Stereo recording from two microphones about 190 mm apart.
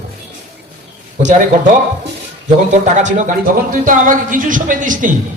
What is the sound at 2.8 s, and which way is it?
Speech, 40° right (ahead or behind).